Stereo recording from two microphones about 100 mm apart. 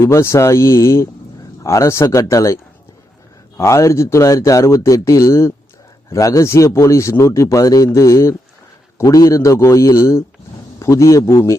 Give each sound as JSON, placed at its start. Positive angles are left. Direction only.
{"t": 0.0, "sound": "a man's voice", "side_deg": 30}
{"t": 3.6, "sound": "a man's voice", "side_deg": 30}